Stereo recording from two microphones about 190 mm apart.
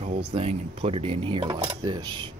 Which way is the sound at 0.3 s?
30° right (ahead or behind).